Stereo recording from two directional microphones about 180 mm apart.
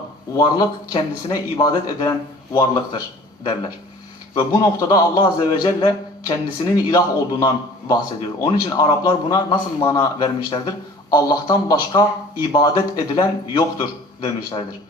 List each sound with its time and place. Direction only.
0.3 s a man's voice: 20° left (ahead or behind)